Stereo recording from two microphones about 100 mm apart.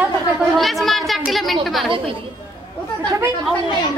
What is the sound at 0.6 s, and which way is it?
Chatter, centre (ahead or behind).